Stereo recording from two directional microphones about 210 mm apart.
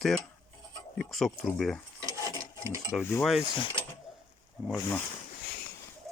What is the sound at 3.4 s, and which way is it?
Speech, 25° left (ahead or behind).